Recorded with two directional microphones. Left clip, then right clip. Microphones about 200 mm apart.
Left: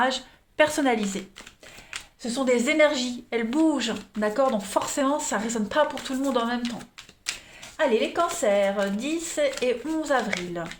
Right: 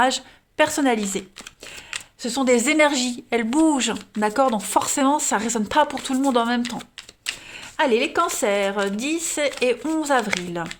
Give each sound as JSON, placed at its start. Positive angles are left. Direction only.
{"t": 0.0, "sound": "speech", "side_deg": -35}
{"t": 2.2, "sound": "a woman's voice", "side_deg": -55}
{"t": 7.8, "sound": "a woman's voice", "side_deg": -50}